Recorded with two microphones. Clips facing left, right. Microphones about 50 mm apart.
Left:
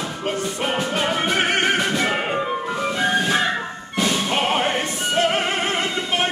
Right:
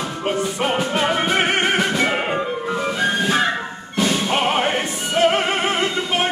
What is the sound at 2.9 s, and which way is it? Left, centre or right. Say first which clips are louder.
Ice cream truck: left 1 dB; centre.